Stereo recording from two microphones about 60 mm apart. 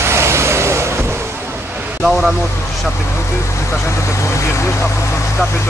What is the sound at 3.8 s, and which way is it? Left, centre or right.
Speech, left.